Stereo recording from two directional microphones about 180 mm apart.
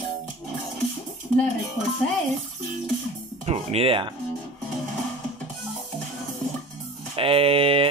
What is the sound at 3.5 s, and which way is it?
Speech, 35° right (ahead or behind).